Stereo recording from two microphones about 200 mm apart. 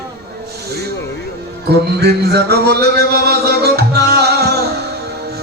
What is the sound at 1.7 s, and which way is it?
Music, 55° right (ahead or behind).